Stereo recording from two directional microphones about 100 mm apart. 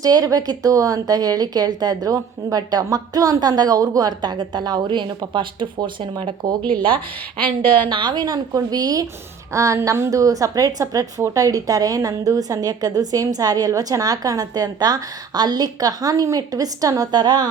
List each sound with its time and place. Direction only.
0.0 s speech: 40° right (ahead or behind); by 6.3 s 55° right (ahead or behind)
6.6 s speech: 15° left (ahead or behind)
7.9 s speech: 50° right (ahead or behind)